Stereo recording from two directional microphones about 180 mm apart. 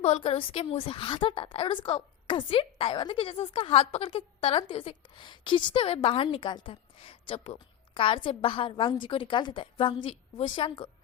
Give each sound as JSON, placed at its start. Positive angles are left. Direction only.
{"t": 0.0, "sound": "a woman's voice", "side_deg": 35}